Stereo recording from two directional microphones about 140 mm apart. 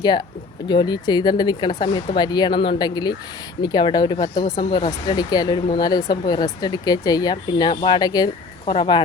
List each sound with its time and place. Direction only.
0.0 s speech: 30° left (ahead or behind)